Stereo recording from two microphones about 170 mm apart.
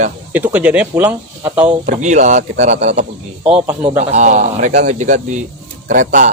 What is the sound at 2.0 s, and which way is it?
Speech, 45° right (ahead or behind).